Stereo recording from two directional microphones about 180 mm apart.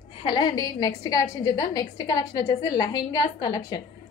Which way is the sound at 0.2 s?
25° left (ahead or behind).